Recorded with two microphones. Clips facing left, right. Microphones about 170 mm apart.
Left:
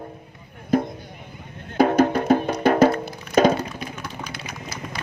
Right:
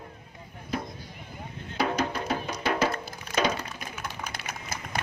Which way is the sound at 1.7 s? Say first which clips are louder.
Left 11 dB; 55° left (ahead or behind).